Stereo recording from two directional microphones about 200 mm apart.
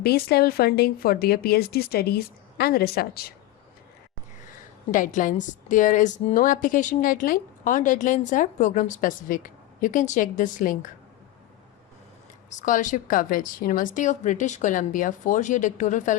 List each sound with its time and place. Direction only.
0.0 s speech: 50° left (ahead or behind)
4.9 s a woman's voice: 40° left (ahead or behind)
12.5 s a woman's voice: 40° left (ahead or behind)